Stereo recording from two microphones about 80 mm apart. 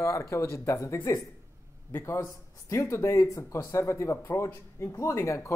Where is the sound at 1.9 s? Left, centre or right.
Left.